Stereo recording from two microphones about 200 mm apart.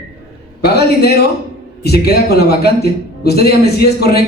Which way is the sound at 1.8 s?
50° left (ahead or behind).